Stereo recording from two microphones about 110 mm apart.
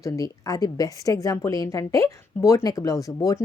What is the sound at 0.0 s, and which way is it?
Speech, 30° left (ahead or behind).